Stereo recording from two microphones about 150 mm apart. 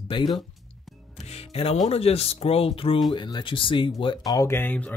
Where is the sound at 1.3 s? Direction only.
40° left (ahead or behind); by 4.9 s 10° left (ahead or behind).